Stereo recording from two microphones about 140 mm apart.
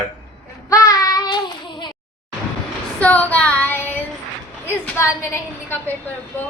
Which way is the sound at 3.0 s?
10° left (ahead or behind).